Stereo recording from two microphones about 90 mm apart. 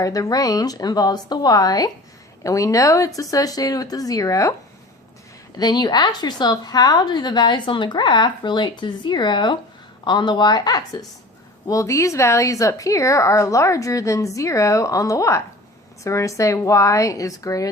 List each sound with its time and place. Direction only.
0.0 s a woman's voice: 40° left (ahead or behind)
5.5 s a woman's voice: 50° left (ahead or behind)
11.7 s a woman's voice: 35° left (ahead or behind)